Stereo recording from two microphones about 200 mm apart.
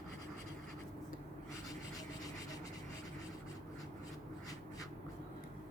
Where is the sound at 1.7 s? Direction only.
20° left (ahead or behind).